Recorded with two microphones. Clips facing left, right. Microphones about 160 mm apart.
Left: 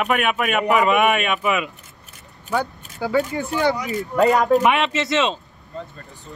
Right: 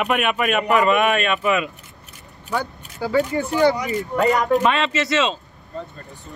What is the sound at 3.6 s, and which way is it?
Speech, centre (ahead or behind).